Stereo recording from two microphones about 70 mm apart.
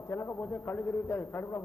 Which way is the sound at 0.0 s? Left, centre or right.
Left.